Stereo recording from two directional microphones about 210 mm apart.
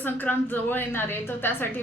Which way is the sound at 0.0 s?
10° left (ahead or behind).